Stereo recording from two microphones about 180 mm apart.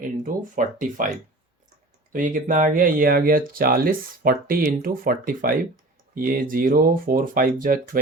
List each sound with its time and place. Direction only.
0.0 s speech: 45° right (ahead or behind)
2.1 s speech: 45° right (ahead or behind)